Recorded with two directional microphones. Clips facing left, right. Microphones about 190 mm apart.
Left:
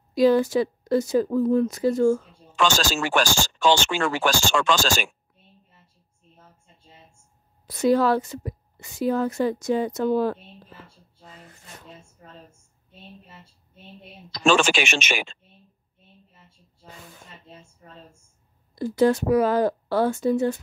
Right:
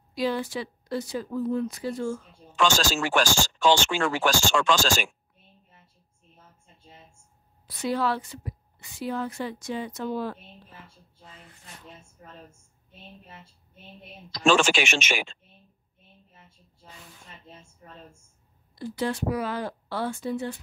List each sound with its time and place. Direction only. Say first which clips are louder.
0.1 s a woman's voice: left 10 dB; 45° left (ahead or behind)
2.5 s speech: left 1 dB; 70° left (ahead or behind)
7.6 s a woman's voice: left 7 dB; 45° left (ahead or behind)
11.2 s a sound: left 4 dB; 40° left (ahead or behind)
14.4 s speech: left 1 dB; 65° left (ahead or behind)
18.8 s a woman's voice: left 9 dB; 45° left (ahead or behind)